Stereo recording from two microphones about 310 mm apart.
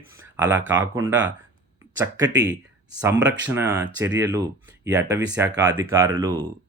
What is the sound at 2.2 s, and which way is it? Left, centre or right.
Speech, right.